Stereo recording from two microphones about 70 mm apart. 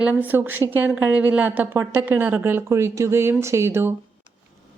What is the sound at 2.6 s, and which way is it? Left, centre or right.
Speech, right.